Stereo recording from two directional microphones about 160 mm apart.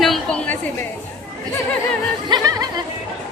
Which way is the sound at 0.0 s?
5° left (ahead or behind).